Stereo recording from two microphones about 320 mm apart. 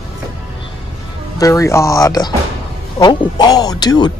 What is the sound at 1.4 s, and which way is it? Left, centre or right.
A man's voice, centre.